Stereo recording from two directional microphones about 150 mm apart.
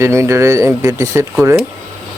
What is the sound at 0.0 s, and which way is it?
Speech, 20° right (ahead or behind).